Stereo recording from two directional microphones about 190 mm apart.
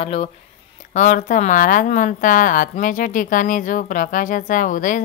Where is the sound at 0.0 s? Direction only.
30° left (ahead or behind).